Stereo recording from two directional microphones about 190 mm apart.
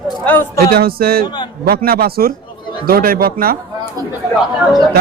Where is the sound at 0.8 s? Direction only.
50° right (ahead or behind).